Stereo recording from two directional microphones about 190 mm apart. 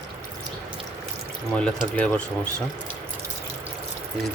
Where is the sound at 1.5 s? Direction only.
5° left (ahead or behind).